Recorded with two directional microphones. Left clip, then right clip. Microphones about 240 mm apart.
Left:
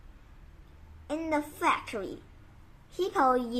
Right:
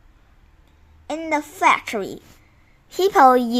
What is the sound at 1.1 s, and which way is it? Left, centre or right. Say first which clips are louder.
A woman's voice: right 7 dB; right.